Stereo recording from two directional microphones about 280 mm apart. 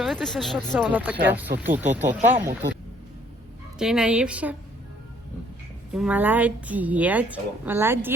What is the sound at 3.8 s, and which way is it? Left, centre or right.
Speech, centre.